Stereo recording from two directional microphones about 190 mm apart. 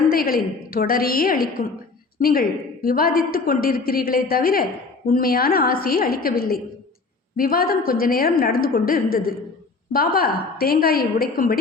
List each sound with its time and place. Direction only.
0.1 s a woman's voice: 50° left (ahead or behind)